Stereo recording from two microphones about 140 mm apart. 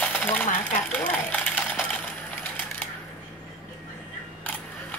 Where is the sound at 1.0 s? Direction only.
10° left (ahead or behind).